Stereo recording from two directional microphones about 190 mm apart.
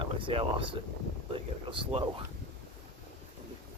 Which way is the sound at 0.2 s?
25° right (ahead or behind).